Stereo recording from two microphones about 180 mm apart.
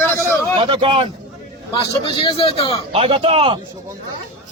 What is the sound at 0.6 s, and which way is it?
Speech, 25° right (ahead or behind).